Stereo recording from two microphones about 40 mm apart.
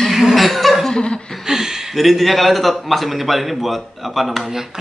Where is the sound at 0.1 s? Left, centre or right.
Centre.